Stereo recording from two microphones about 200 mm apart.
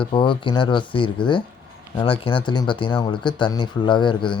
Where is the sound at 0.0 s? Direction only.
25° left (ahead or behind).